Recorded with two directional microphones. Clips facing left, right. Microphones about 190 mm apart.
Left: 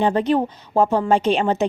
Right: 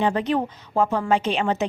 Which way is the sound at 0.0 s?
35° left (ahead or behind).